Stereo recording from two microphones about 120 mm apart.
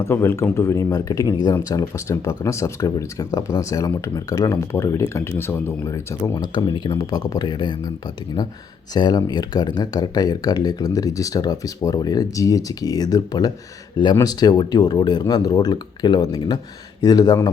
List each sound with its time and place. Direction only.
0.0 s speech: 20° left (ahead or behind)